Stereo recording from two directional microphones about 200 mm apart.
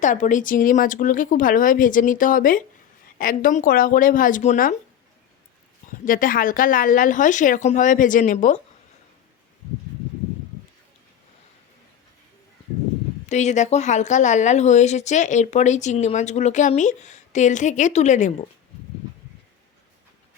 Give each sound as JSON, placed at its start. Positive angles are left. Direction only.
{"t": 0.0, "sound": "a woman's voice", "side_deg": 40}
{"t": 6.1, "sound": "a woman's voice", "side_deg": 45}
{"t": 13.2, "sound": "a woman's voice", "side_deg": 35}